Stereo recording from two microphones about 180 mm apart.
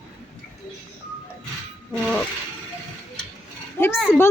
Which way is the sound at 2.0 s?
Centre (ahead or behind).